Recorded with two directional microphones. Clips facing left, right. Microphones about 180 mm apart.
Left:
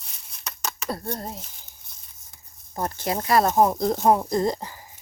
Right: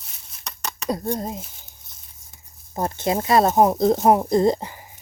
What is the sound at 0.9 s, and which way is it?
Speech, 20° right (ahead or behind).